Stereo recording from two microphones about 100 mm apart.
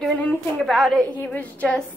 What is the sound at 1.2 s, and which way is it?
Speech, 15° left (ahead or behind).